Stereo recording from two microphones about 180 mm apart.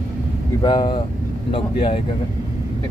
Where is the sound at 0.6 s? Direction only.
25° left (ahead or behind).